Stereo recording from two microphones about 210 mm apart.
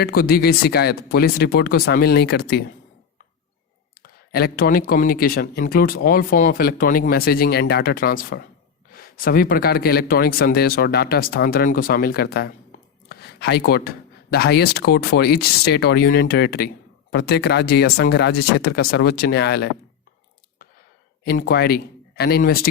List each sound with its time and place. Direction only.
0.0 s speech: 45° left (ahead or behind)
4.0 s speech: 50° left (ahead or behind)
21.2 s speech: 45° left (ahead or behind)